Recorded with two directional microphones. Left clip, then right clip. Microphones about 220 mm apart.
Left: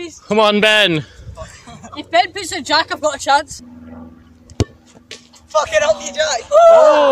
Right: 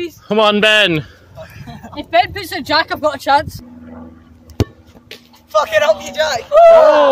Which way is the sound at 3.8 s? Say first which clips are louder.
Right 2 dB; 25° right (ahead or behind).